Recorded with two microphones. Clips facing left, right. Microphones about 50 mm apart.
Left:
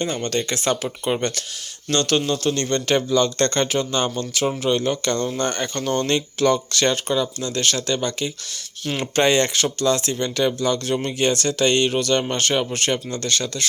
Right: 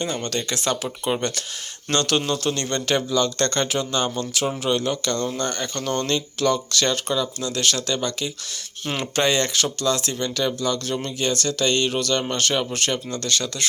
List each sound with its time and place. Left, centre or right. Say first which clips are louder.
0.0 s speech: left 3 dB; centre
2.9 s speech: left 2 dB; centre
5.4 s speech: left 3 dB; centre
5.7 s speech: left 2 dB; centre